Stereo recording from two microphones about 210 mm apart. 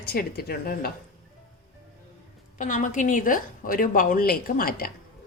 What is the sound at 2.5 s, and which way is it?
A woman's voice, 40° left (ahead or behind).